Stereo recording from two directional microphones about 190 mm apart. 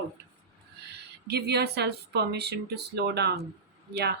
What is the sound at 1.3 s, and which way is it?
Speech, 60° right (ahead or behind).